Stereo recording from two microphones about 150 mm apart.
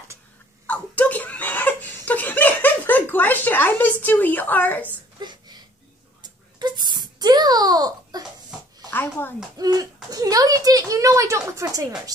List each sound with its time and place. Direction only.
0.7 s laughter: 10° left (ahead or behind)
4.0 s speech: 10° left (ahead or behind)
5.2 s a sound: 30° right (ahead or behind)
6.6 s babbling: 30° right (ahead or behind)
8.9 s speech: 10° left (ahead or behind)
9.6 s speech: 25° right (ahead or behind)